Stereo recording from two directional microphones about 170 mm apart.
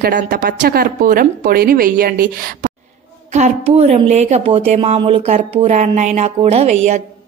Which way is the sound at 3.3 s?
40° right (ahead or behind).